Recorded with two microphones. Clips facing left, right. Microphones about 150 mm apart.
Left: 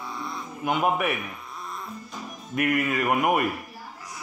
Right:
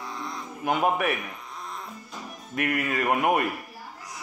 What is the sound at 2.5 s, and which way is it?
Speech, 40° right (ahead or behind).